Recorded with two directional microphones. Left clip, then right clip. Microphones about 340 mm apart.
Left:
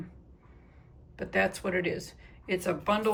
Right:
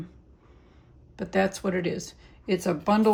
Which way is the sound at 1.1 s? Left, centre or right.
Centre.